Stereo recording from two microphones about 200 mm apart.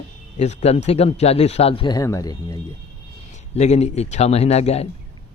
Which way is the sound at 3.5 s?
35° left (ahead or behind).